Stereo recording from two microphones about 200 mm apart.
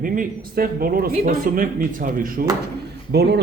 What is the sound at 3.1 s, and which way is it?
Speech, 55° right (ahead or behind).